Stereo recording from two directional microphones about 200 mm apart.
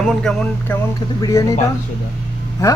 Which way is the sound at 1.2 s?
15° left (ahead or behind).